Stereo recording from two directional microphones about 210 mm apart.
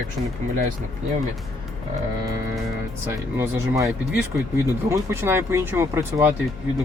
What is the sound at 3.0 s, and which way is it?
Speech, 10° right (ahead or behind).